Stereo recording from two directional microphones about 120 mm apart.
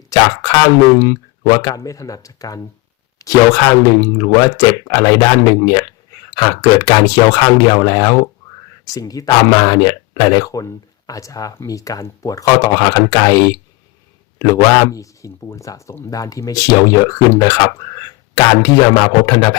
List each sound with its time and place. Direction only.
0.1 s speech: 30° left (ahead or behind)